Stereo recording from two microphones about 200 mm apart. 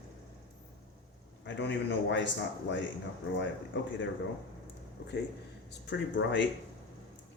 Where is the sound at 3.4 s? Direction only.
65° left (ahead or behind).